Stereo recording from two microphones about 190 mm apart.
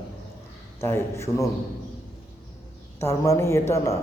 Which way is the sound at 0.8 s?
15° left (ahead or behind).